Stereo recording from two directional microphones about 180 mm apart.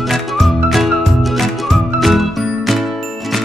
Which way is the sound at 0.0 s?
Centre (ahead or behind).